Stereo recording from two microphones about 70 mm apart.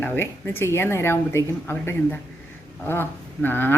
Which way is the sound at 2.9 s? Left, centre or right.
Left.